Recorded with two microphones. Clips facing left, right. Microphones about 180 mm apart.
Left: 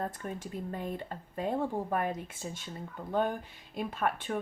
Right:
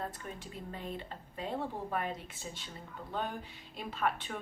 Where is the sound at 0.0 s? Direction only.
45° left (ahead or behind).